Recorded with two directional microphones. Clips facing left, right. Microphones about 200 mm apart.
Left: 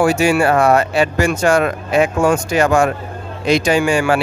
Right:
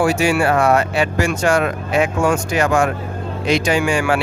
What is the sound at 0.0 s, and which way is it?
Speech, 45° left (ahead or behind).